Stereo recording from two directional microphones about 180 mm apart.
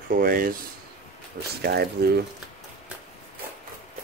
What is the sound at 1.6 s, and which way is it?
Speech, 65° right (ahead or behind).